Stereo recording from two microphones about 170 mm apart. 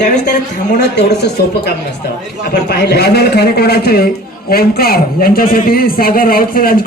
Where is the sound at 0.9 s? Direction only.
80° left.